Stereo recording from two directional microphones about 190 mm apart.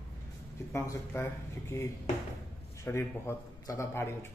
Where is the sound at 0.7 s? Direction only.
15° left (ahead or behind).